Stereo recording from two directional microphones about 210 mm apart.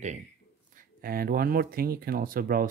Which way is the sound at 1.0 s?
45° right (ahead or behind).